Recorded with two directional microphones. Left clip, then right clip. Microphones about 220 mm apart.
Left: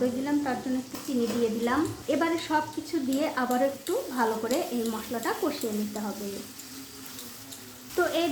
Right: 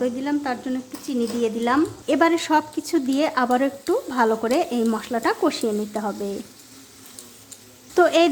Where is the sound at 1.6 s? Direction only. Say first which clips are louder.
Right 7 dB; 40° right (ahead or behind).